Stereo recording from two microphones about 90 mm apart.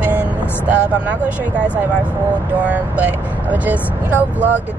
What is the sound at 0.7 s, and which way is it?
Speech, 15° right (ahead or behind).